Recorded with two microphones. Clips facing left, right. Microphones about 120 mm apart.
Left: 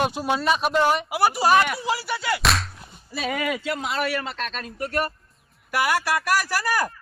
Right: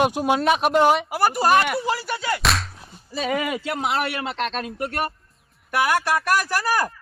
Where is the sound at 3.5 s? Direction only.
55° right (ahead or behind); by 4.9 s 80° right.